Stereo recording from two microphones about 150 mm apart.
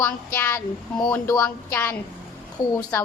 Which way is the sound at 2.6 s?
30° left (ahead or behind).